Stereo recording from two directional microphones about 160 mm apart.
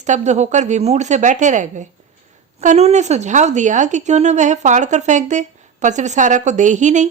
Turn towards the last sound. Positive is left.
turn(degrees=-50)  # may be behind; listen again after turning